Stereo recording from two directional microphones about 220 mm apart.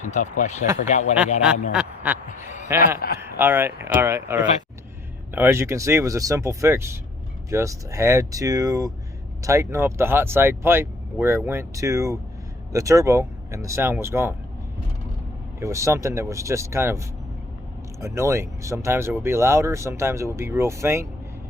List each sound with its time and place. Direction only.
0.0 s speech: 35° left (ahead or behind)
1.7 s quack: 5° right (ahead or behind)
2.7 s speech: 10° right (ahead or behind)
15.6 s speech: 15° right (ahead or behind)